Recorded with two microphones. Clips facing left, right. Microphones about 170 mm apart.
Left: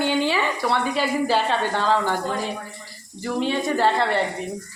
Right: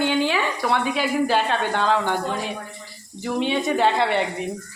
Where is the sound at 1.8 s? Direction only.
5° left (ahead or behind).